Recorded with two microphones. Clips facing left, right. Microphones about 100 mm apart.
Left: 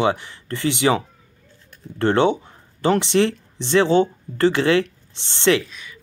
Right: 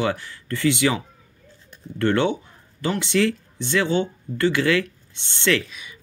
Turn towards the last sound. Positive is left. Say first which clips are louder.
# left 4 dB
turn(degrees=30)  # may be behind; listen again after turning